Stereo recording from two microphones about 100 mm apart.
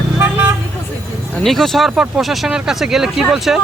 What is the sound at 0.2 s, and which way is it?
Vehicle, 15° right (ahead or behind).